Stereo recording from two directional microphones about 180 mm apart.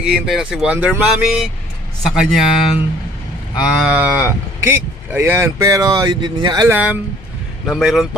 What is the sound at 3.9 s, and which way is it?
Speech, 10° right (ahead or behind).